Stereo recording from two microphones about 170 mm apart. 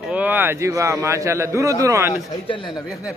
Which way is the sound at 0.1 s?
10° right (ahead or behind).